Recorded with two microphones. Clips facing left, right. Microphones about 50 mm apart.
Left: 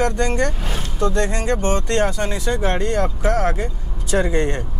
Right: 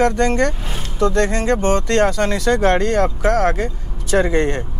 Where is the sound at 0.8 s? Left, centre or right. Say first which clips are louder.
Right 4 dB; right.